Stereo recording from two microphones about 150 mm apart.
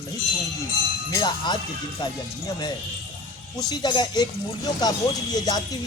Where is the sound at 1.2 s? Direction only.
30° left (ahead or behind).